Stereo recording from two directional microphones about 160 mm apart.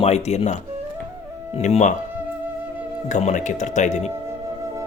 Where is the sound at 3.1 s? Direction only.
50° left (ahead or behind).